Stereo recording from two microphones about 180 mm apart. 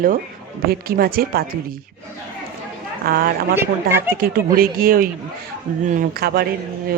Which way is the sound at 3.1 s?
55° right (ahead or behind).